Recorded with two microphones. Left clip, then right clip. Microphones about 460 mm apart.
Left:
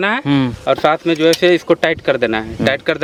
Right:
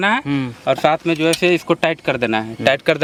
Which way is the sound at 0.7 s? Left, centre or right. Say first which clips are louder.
Left 1 dB; right.